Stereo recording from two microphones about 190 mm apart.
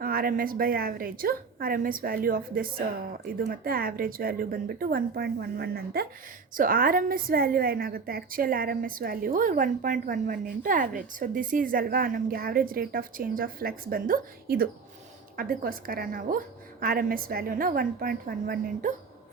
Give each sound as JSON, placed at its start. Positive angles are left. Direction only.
{"t": 0.0, "sound": "a woman's voice", "side_deg": -50}